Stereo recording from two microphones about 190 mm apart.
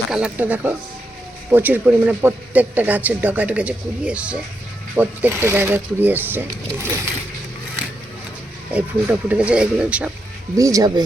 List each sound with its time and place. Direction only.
0.1 s speech: 5° right (ahead or behind)
8.7 s speech: 5° right (ahead or behind)
10.6 s speech: 20° right (ahead or behind)